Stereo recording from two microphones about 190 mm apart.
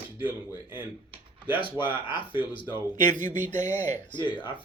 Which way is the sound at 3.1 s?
40° right (ahead or behind).